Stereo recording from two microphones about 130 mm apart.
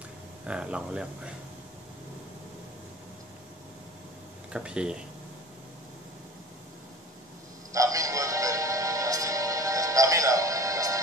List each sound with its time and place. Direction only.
0.5 s speech: 10° right (ahead or behind)
4.5 s speech: 5° right (ahead or behind)
7.7 s music: 25° right (ahead or behind)